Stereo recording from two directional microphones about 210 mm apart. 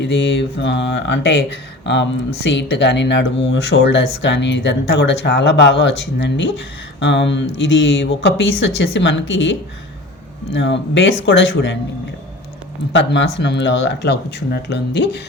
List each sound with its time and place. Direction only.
0.0 s speech: 60° left (ahead or behind)
10.6 s speech: 55° left (ahead or behind)
12.9 s speech: 60° left (ahead or behind)